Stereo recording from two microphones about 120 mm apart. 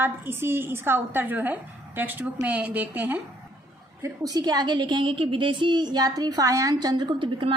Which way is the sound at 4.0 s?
30° right (ahead or behind).